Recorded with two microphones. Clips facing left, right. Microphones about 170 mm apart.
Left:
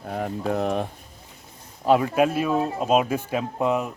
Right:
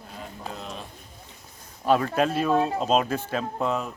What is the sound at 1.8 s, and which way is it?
Speech, 15° left (ahead or behind).